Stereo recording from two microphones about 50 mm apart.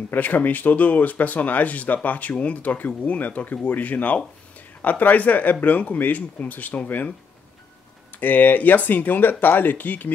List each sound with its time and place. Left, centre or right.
0.1 s speech: left
8.2 s speech: left